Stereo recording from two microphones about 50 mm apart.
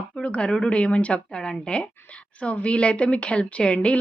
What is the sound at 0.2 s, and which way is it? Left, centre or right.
A woman's voice, centre.